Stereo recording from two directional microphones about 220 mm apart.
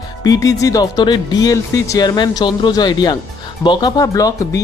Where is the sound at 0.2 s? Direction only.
15° left (ahead or behind).